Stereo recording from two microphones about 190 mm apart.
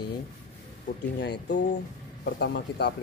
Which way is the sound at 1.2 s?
60° left (ahead or behind).